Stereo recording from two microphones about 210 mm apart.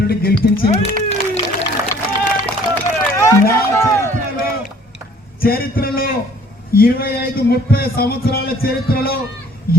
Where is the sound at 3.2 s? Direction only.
10° left (ahead or behind).